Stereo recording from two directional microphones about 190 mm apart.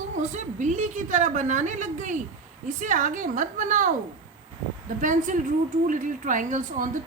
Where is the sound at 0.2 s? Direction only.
40° right (ahead or behind).